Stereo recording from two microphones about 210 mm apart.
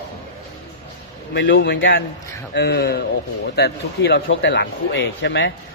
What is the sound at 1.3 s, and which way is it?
Speech, 55° left (ahead or behind).